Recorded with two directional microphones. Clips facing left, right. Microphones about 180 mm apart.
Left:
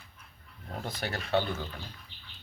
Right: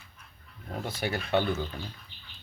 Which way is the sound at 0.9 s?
10° right (ahead or behind).